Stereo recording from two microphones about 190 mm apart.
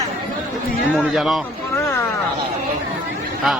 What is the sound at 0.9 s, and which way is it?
Speech, centre (ahead or behind).